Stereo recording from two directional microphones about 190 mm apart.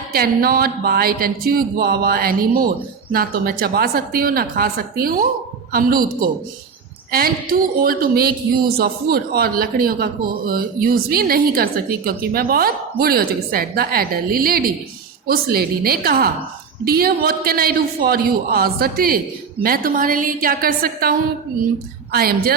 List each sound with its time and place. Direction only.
0.1 s speech: 50° right (ahead or behind)
7.1 s speech: 50° right (ahead or behind)